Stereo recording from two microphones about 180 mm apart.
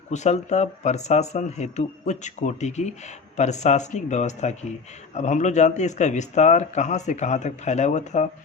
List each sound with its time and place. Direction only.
0.1 s speech: 40° left (ahead or behind)